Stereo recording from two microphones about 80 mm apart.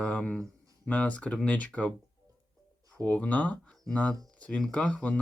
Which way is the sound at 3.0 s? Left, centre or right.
Centre.